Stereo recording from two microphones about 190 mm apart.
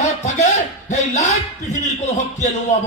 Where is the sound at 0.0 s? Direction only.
35° left (ahead or behind).